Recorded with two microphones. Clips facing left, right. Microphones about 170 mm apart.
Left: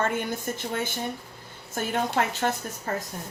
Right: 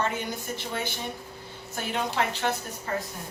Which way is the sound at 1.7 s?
45° left (ahead or behind).